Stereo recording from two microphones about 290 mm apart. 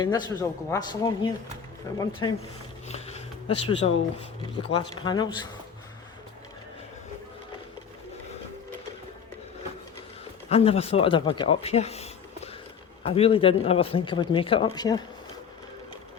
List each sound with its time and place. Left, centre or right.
0.0 s speech: centre
10.5 s speech: left